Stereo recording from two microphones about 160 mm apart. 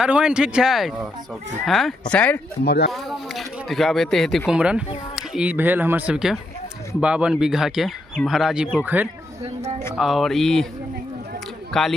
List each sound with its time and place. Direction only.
0.0 s speech: 5° right (ahead or behind)
2.6 s speech: 90° left
2.9 s speech: centre (ahead or behind)
9.4 s a woman's voice: 45° right (ahead or behind)
9.9 s speech: centre (ahead or behind)
11.7 s a man's voice: centre (ahead or behind)